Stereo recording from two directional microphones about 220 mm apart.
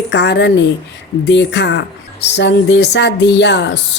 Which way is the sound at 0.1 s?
50° left (ahead or behind).